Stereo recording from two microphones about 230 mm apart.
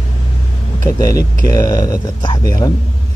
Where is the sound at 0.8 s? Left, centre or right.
Centre.